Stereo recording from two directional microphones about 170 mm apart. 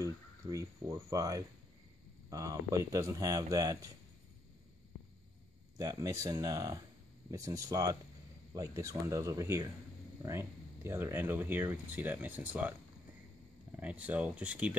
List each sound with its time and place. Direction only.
0.0 s speech: 20° right (ahead or behind)
5.8 s speech: 20° right (ahead or behind)
13.7 s speech: 10° right (ahead or behind)